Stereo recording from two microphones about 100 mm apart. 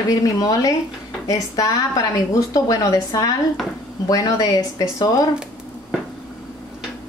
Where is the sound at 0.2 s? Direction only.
35° left (ahead or behind).